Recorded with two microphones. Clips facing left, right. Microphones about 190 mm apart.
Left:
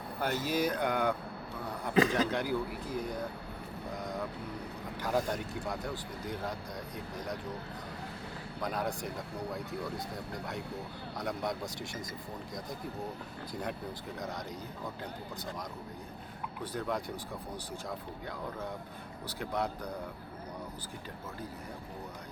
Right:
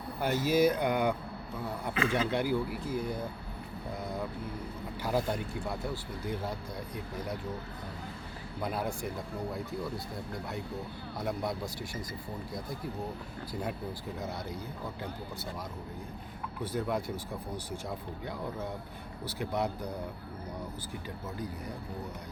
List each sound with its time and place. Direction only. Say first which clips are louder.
0.2 s speech: right 5 dB; 10° right (ahead or behind)
2.0 s a man's voice: left 4 dB; 40° left (ahead or behind)
2.4 s speech: right 3 dB; 10° right (ahead or behind)
5.0 s speech: right 1 dB; 10° right (ahead or behind)
8.6 s speech: right 1 dB; 5° right (ahead or behind)
11.2 s speech: right 1 dB; 5° right (ahead or behind)
13.5 s speech: right 2 dB; 5° right (ahead or behind)
16.7 s speech: right 3 dB; 10° right (ahead or behind)
19.4 s speech: right 2 dB; 10° right (ahead or behind)